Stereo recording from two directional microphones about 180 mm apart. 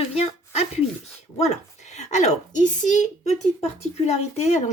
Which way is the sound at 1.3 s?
35° left (ahead or behind).